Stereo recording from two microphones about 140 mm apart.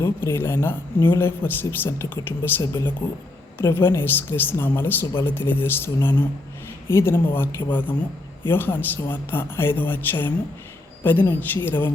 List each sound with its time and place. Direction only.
0.0 s speech: 15° left (ahead or behind)